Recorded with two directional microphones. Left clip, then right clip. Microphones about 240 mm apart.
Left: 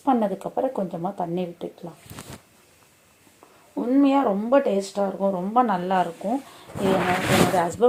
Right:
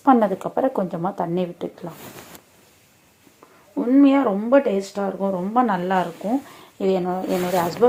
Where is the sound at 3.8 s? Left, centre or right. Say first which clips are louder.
Right 3 dB; right.